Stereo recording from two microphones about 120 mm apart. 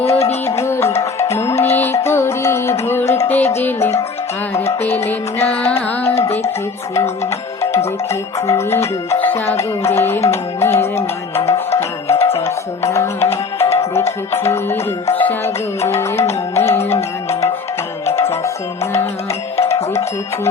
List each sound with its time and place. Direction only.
0.4 s music: 20° left (ahead or behind)
5.4 s music: 55° left (ahead or behind)
8.4 s speech: 25° left (ahead or behind)
10.6 s music: 20° left (ahead or behind)
18.0 s music: 20° left (ahead or behind)